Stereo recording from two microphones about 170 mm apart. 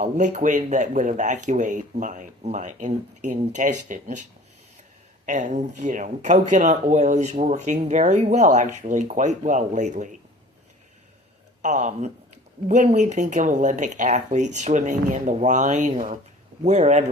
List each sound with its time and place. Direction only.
0.0 s speech: 45° right (ahead or behind)
11.6 s speech: 45° right (ahead or behind)